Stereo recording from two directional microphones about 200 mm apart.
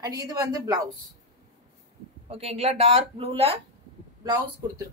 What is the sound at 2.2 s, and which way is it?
A woman's voice, 30° right (ahead or behind).